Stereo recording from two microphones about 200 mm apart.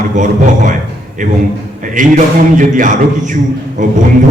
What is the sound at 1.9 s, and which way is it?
Speech, 40° right (ahead or behind).